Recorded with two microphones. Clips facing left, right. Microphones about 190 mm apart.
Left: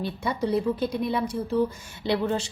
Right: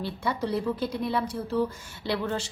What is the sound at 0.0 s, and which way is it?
A woman's voice, 15° left (ahead or behind).